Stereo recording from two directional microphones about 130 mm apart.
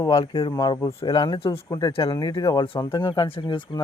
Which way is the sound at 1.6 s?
30° left (ahead or behind).